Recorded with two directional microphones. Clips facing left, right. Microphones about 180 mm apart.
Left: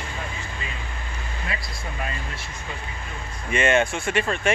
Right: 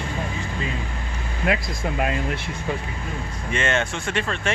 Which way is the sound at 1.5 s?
70° right (ahead or behind).